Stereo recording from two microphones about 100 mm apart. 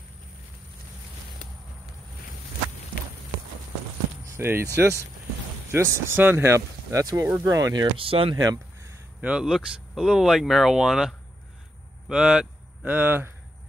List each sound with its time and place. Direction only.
4.3 s speech: 25° right (ahead or behind)
5.7 s speech: 30° right (ahead or behind)
8.0 s speech: 65° right (ahead or behind)
9.2 s speech: 10° right (ahead or behind)